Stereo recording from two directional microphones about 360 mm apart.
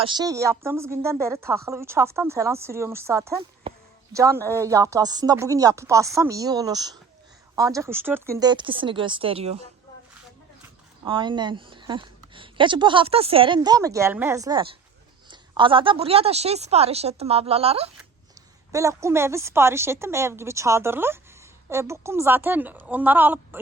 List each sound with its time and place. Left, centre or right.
0.0 s a woman's voice: centre
11.0 s a woman's voice: centre